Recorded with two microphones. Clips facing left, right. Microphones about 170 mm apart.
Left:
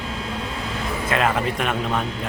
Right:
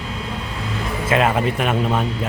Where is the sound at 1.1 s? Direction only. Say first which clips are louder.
Right 4 dB; 5° right (ahead or behind).